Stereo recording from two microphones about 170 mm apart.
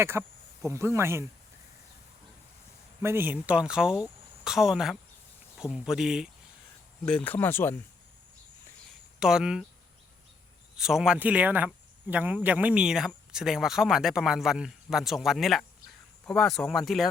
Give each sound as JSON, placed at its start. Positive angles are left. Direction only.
{"t": 0.0, "sound": "speech", "side_deg": -15}
{"t": 3.0, "sound": "speech", "side_deg": -15}
{"t": 9.2, "sound": "speech", "side_deg": -5}
{"t": 10.8, "sound": "speech", "side_deg": -5}